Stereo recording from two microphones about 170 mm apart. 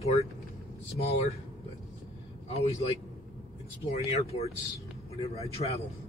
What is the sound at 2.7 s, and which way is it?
Speech, 40° left (ahead or behind).